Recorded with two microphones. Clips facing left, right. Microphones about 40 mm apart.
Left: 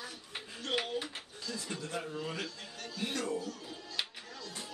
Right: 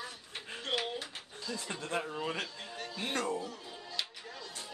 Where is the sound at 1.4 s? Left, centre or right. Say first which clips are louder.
Right 1 dB; centre.